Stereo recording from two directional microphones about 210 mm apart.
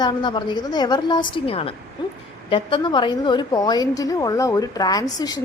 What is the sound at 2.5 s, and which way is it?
A woman's voice, 25° left (ahead or behind).